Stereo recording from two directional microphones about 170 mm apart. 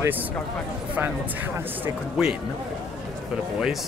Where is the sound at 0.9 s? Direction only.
10° right (ahead or behind).